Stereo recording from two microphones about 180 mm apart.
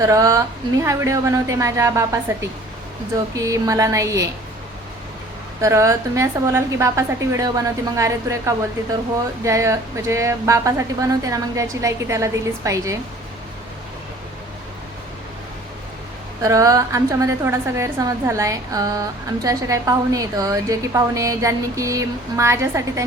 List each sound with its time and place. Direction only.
0.0 s a woman's voice: 20° right (ahead or behind)
5.5 s a woman's voice: 15° right (ahead or behind)
16.4 s a woman's voice: 20° right (ahead or behind)